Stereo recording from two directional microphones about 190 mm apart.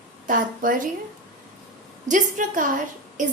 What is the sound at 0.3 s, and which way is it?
Speech, 45° right (ahead or behind).